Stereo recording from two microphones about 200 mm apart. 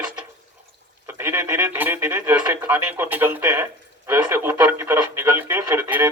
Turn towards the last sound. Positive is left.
turn(degrees=-10)  # may be behind; listen again after turning